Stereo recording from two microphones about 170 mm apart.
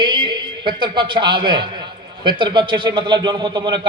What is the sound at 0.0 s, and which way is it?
A man's voice, 25° right (ahead or behind).